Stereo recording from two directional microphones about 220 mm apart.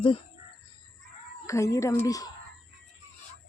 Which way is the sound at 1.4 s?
15° left (ahead or behind).